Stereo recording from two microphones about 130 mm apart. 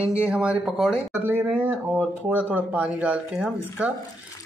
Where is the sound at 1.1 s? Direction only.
15° right (ahead or behind).